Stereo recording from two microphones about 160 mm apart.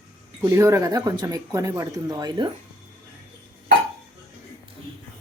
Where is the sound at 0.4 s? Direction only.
20° right (ahead or behind).